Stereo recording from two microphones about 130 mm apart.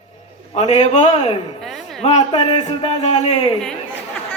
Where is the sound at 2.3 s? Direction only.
40° left (ahead or behind).